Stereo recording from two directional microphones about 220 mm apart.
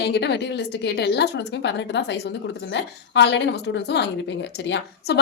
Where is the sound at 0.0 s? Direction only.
50° left (ahead or behind).